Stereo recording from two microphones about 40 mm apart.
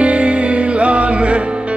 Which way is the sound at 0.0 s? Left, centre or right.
Right.